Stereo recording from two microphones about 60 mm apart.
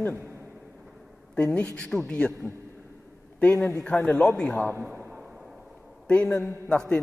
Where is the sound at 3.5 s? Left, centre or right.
Centre.